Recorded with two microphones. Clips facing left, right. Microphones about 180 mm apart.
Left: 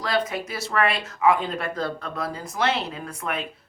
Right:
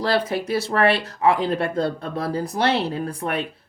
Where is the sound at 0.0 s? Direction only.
30° right (ahead or behind).